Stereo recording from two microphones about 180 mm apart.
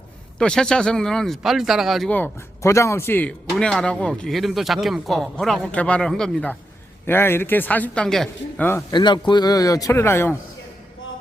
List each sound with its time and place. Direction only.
0.3 s a man's voice: 5° left (ahead or behind)
8.9 s a man's voice: 25° left (ahead or behind)